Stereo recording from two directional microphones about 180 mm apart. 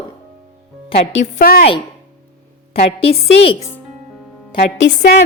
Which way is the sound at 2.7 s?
35° left (ahead or behind).